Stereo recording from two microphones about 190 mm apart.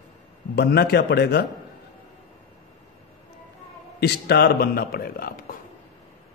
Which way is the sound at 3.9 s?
60° left (ahead or behind).